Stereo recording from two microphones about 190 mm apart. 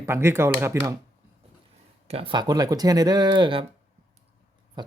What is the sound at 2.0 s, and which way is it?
Speech, 30° right (ahead or behind).